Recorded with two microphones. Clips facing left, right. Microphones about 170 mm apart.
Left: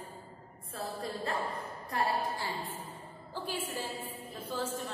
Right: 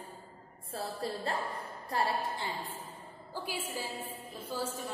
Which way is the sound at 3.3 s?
10° right (ahead or behind).